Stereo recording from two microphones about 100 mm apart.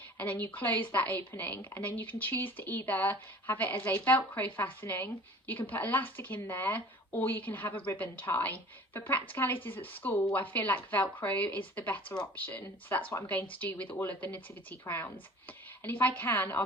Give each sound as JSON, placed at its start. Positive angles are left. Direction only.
{"t": 0.2, "sound": "a woman's voice", "side_deg": 20}